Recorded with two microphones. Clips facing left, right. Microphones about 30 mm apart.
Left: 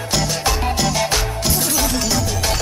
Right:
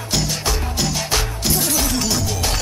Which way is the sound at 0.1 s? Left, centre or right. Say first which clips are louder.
Left 2 dB; centre.